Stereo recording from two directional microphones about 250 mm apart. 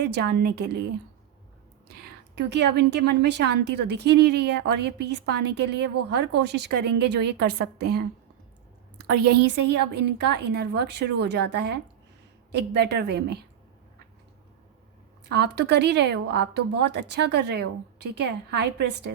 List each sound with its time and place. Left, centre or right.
0.0 s a woman's voice: right
1.9 s a woman's voice: right
9.0 s a woman's voice: right
15.3 s a woman's voice: right